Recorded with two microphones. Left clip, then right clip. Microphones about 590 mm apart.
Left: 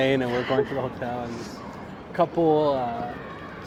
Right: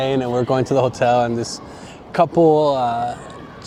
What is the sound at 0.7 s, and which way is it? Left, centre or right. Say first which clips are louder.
Speech: right 14 dB; right.